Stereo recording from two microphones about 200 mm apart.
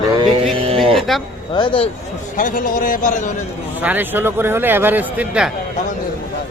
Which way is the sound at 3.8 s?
10° right (ahead or behind).